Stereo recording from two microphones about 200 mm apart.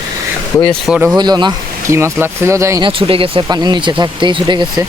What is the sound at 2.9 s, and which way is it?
Speech, 25° right (ahead or behind).